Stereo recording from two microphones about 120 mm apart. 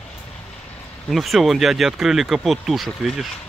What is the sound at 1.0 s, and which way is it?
Speech, centre (ahead or behind).